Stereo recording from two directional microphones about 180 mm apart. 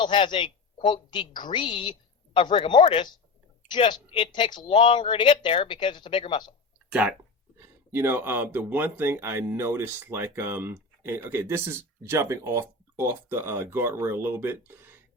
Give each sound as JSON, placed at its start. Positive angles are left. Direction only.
{"t": 0.0, "sound": "a woman's voice", "side_deg": 25}
{"t": 7.6, "sound": "speech", "side_deg": -10}